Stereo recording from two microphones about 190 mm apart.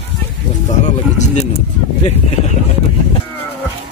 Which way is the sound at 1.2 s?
40° left (ahead or behind).